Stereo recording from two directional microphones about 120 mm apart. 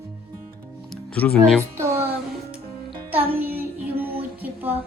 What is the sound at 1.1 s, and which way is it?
Speech, 10° left (ahead or behind).